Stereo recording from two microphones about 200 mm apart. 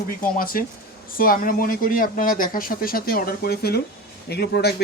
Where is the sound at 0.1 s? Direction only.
45° left (ahead or behind).